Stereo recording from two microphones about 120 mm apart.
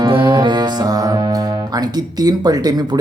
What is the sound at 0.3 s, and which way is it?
Speech, 40° right (ahead or behind).